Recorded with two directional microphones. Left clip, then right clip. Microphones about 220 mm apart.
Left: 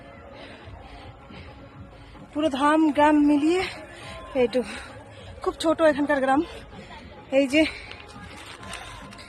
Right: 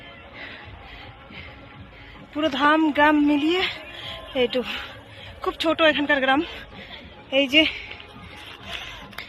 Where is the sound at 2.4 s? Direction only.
Centre (ahead or behind).